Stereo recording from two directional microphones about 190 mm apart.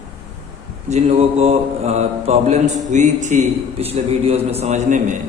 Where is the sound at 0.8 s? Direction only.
35° right (ahead or behind).